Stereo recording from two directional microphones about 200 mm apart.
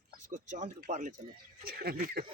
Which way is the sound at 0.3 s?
40° right (ahead or behind).